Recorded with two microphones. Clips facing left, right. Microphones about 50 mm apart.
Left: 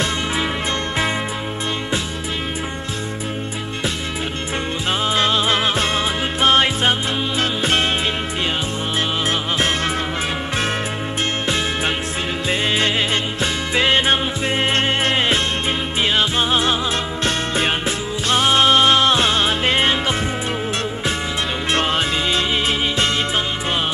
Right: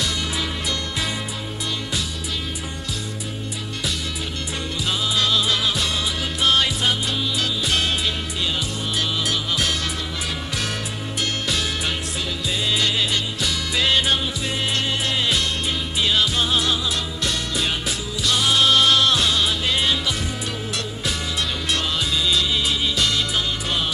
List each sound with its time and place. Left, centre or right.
5.0 s music: left
9.3 s music: left
11.4 s music: left
21.7 s music: left